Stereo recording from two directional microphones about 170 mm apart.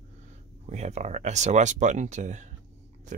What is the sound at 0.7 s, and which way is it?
Speech, 40° right (ahead or behind).